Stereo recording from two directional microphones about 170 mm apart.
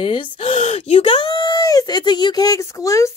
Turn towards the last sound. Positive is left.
turn(degrees=20)  # may be behind; listen again after turning